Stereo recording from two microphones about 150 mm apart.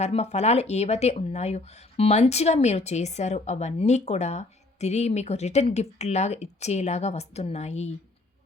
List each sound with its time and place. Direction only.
0.0 s speech: 45° left (ahead or behind)